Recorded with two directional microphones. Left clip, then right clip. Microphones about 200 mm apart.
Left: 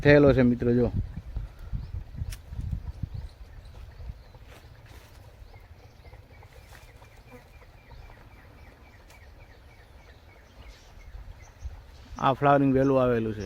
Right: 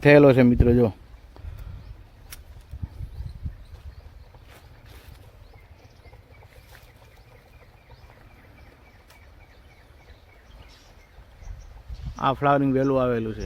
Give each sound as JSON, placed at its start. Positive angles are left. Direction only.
{"t": 0.0, "sound": "speech", "side_deg": -30}
{"t": 12.1, "sound": "a man's voice", "side_deg": 0}